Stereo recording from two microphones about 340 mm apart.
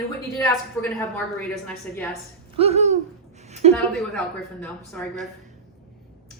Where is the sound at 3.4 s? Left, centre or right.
Centre.